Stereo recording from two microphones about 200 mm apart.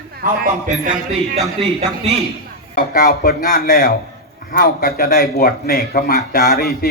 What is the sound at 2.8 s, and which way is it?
A man's voice, 50° left (ahead or behind).